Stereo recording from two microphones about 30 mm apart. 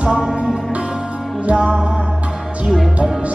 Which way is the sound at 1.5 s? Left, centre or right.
Right.